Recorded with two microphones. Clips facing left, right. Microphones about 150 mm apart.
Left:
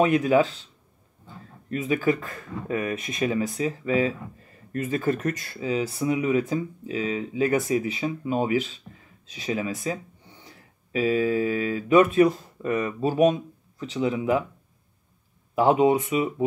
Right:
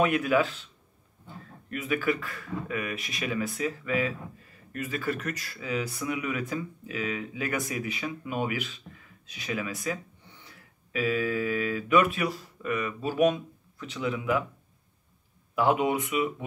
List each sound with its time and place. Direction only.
0.0 s speech: 35° left (ahead or behind)
1.7 s speech: 35° left (ahead or behind)
2.0 s speech: 25° left (ahead or behind)
15.5 s speech: 35° left (ahead or behind)